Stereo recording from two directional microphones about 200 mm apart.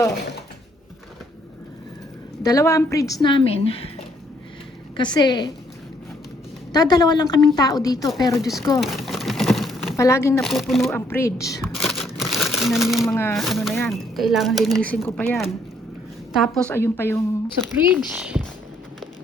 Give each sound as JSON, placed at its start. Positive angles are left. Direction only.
{"t": 2.4, "sound": "speech", "side_deg": 15}
{"t": 5.1, "sound": "speech", "side_deg": 20}
{"t": 6.7, "sound": "speech", "side_deg": 20}
{"t": 8.4, "sound": "speech", "side_deg": 0}
{"t": 8.8, "sound": "a sound", "side_deg": 0}
{"t": 10.0, "sound": "a woman's voice", "side_deg": 15}
{"t": 10.4, "sound": "speech", "side_deg": 0}
{"t": 10.9, "sound": "a woman's voice", "side_deg": 15}
{"t": 11.6, "sound": "crumpling", "side_deg": 0}
{"t": 13.1, "sound": "a woman's voice", "side_deg": 10}
{"t": 13.3, "sound": "a woman's voice", "side_deg": 0}
{"t": 17.7, "sound": "speech", "side_deg": -10}